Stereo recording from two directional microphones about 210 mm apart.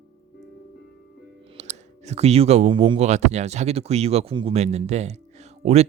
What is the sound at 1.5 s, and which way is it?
Speech, 30° right (ahead or behind).